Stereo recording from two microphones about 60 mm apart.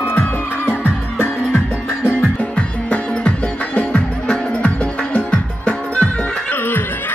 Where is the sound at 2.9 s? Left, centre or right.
Left.